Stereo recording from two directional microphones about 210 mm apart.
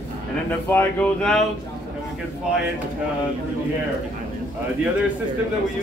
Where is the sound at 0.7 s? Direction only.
5° left (ahead or behind).